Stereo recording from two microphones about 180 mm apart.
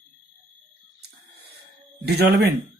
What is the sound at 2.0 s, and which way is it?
Speech, 65° right (ahead or behind).